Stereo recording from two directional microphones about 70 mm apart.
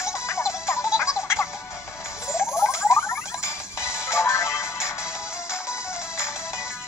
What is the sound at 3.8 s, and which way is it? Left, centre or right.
Music, left.